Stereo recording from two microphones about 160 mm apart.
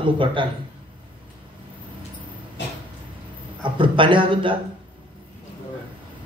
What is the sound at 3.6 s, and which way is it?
A man's voice, 30° right (ahead or behind).